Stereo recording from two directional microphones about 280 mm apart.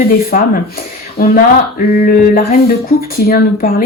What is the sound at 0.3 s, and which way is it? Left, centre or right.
Speech, left.